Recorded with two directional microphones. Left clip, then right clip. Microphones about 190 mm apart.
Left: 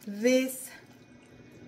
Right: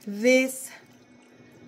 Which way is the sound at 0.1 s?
45° right (ahead or behind).